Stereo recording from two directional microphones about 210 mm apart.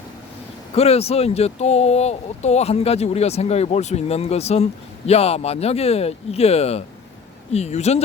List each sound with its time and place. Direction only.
0.7 s speech: 30° left (ahead or behind)